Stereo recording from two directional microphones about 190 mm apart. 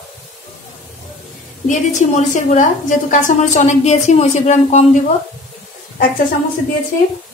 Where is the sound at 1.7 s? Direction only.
40° left (ahead or behind).